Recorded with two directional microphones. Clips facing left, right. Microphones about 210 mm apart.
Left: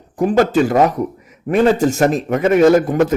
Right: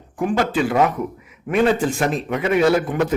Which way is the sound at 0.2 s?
40° left (ahead or behind).